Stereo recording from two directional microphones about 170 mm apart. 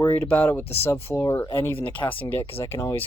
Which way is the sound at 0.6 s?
35° left (ahead or behind).